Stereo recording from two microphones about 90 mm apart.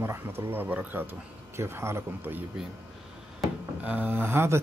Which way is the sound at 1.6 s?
30° right (ahead or behind).